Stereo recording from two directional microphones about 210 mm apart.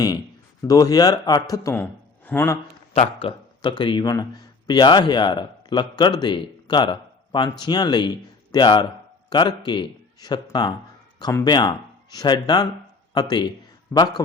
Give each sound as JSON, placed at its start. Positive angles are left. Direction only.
{"t": 0.7, "sound": "a man's voice", "side_deg": 15}
{"t": 2.9, "sound": "a man's voice", "side_deg": 30}